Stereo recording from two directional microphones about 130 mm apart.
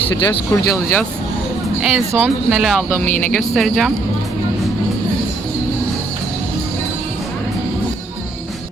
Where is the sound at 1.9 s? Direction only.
15° right (ahead or behind).